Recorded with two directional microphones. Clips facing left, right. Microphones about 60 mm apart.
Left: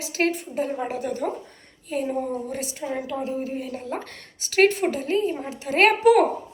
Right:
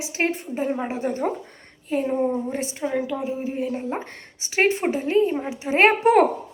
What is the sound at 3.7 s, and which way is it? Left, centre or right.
A woman's voice, right.